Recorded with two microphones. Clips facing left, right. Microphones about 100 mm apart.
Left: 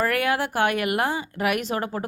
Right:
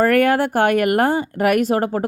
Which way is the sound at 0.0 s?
45° right (ahead or behind).